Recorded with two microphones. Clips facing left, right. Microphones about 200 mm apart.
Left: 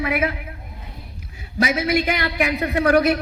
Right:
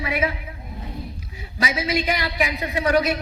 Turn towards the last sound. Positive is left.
turn(degrees=55)  # may be behind; listen again after turning